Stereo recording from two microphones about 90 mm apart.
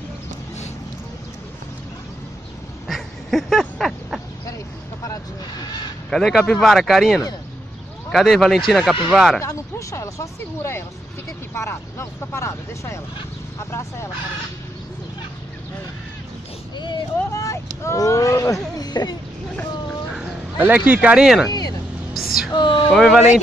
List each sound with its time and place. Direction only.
2.9 s duck: centre (ahead or behind)
5.0 s vehicle: 40° left (ahead or behind)
6.0 s speech: 5° left (ahead or behind)
9.4 s speech: 35° left (ahead or behind)
16.7 s speech: 55° left (ahead or behind)
17.3 s speech: 35° left (ahead or behind); by 19.1 s 50° left (ahead or behind)
20.5 s speech: 20° right (ahead or behind)
21.5 s speech: 45° left (ahead or behind)
22.5 s speech: 60° left (ahead or behind)
22.8 s speech: 5° left (ahead or behind)